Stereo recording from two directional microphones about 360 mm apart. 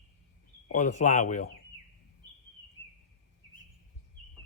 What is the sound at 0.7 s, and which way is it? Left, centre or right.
Speech, left.